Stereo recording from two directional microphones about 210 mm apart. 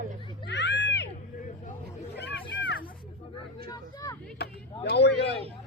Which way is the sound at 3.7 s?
20° left (ahead or behind).